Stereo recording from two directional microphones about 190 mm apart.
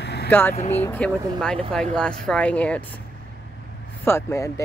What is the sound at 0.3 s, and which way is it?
Speech, 10° left (ahead or behind).